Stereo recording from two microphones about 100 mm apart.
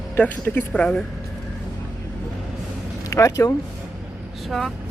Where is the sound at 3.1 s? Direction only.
30° left (ahead or behind).